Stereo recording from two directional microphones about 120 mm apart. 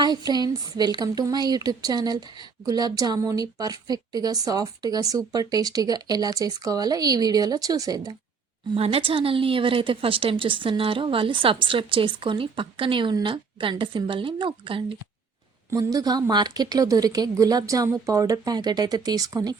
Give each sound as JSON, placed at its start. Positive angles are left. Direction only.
{"t": 0.0, "sound": "a woman's voice", "side_deg": -35}
{"t": 8.7, "sound": "a woman's voice", "side_deg": -50}
{"t": 15.7, "sound": "a woman's voice", "side_deg": -30}